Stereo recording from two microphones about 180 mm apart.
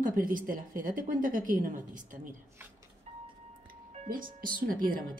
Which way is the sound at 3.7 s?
50° right (ahead or behind).